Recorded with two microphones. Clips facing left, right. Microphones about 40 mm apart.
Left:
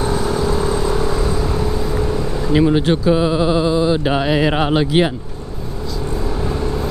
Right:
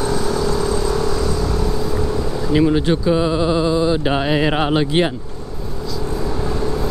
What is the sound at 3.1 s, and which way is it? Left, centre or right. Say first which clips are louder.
Speech: left 2 dB; centre.